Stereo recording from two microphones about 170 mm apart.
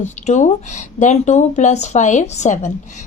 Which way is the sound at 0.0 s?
45° left (ahead or behind).